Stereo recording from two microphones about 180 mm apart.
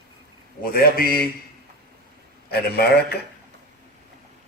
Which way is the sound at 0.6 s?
55° left (ahead or behind).